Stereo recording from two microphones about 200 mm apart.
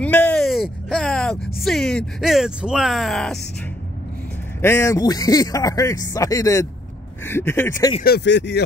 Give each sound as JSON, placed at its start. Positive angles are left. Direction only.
{"t": 0.0, "sound": "speech", "side_deg": 5}
{"t": 4.6, "sound": "a man's voice", "side_deg": 15}
{"t": 8.0, "sound": "speech", "side_deg": 55}